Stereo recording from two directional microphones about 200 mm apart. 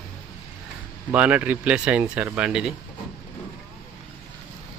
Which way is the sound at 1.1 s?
10° right (ahead or behind).